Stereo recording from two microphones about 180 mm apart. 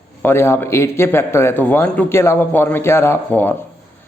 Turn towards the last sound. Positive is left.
turn(degrees=10)  # may be behind; listen again after turning